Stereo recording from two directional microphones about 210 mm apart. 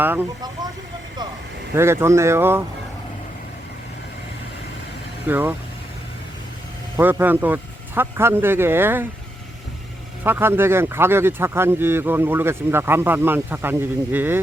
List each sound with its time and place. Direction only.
0.0 s speech: 10° right (ahead or behind)
1.7 s speech: 10° right (ahead or behind)
5.3 s speech: 10° right (ahead or behind)
6.9 s speech: 10° right (ahead or behind)
10.2 s speech: 10° right (ahead or behind)